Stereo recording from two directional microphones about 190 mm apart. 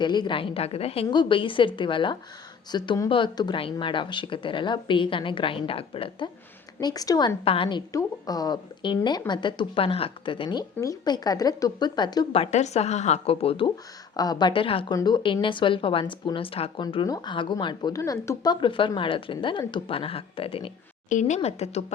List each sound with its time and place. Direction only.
0.0 s a woman's voice: 25° left (ahead or behind)
21.1 s a woman's voice: 40° left (ahead or behind)